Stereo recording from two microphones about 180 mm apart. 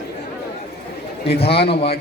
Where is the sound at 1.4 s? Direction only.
30° left (ahead or behind).